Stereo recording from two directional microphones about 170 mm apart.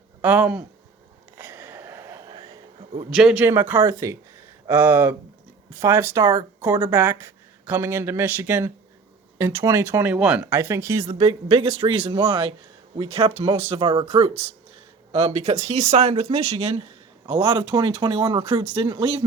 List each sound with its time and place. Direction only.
0.2 s speech: 10° right (ahead or behind)
1.4 s a sound: 15° right (ahead or behind)
3.1 s speech: 5° right (ahead or behind)
11.0 s speech: 35° right (ahead or behind)
15.1 s speech: 35° right (ahead or behind)